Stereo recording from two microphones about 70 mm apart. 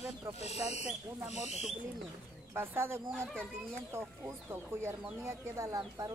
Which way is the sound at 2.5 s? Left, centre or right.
Right.